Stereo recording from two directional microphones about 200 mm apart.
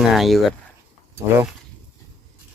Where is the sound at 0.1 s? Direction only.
Centre (ahead or behind).